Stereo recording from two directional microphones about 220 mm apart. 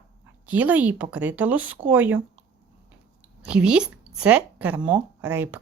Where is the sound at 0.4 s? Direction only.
5° right (ahead or behind).